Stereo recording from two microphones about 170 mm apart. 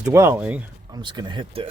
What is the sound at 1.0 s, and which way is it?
Speech, 25° right (ahead or behind).